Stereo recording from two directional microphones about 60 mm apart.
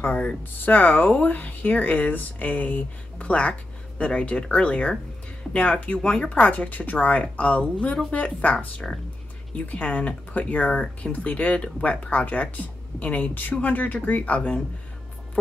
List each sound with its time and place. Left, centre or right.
0.0 s speech: left